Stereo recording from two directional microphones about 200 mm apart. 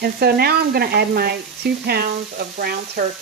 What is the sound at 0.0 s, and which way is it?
Speech, 50° right (ahead or behind).